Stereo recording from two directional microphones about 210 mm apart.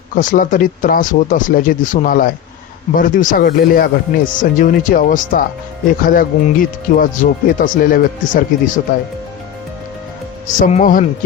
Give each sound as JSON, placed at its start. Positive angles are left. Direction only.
{"t": 0.1, "sound": "speech", "side_deg": 40}
{"t": 10.7, "sound": "speech", "side_deg": 35}